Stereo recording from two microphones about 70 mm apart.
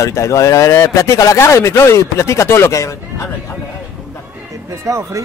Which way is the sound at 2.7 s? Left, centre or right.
Left.